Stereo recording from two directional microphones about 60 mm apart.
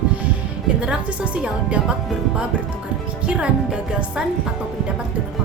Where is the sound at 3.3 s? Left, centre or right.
Centre.